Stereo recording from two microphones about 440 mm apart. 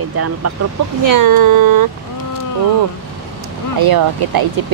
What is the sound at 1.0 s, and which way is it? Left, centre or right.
Speech, right.